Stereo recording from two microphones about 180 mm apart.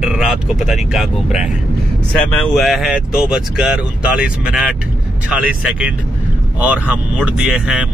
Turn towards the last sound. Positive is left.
turn(degrees=-5)  # may be behind; listen again after turning